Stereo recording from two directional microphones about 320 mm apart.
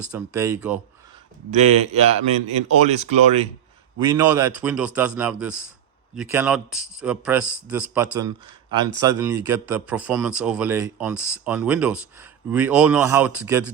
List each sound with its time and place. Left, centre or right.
0.1 s speech: centre
1.5 s a man's voice: right
4.0 s speech: centre